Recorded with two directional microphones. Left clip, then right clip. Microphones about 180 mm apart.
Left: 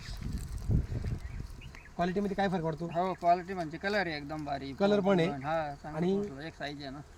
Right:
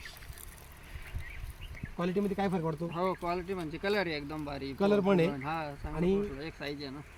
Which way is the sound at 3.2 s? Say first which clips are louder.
Left 7 dB; 45° left (ahead or behind).